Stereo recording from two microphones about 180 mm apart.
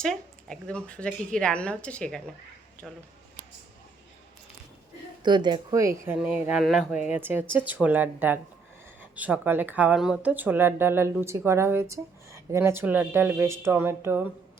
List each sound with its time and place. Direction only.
0.0 s a woman's voice: 5° left (ahead or behind)
5.2 s speech: 25° right (ahead or behind)